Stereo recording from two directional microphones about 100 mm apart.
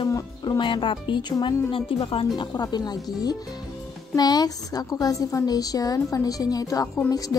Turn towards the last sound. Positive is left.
turn(degrees=35)  # may be behind; listen again after turning